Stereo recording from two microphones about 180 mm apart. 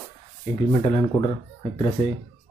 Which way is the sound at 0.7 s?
30° left (ahead or behind).